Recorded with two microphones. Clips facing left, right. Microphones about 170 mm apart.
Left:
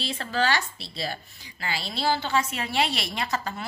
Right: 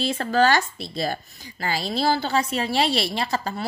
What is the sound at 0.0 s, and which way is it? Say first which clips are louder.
Speech: right 7 dB; 45° right (ahead or behind).